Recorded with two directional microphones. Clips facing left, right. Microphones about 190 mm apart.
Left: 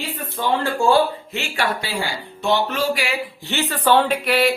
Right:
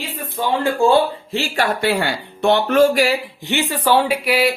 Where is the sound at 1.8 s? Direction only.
60° right (ahead or behind); by 3.2 s 40° right (ahead or behind).